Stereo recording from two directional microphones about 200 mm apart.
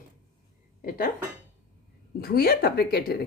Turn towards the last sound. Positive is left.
turn(degrees=50)  # may be behind; listen again after turning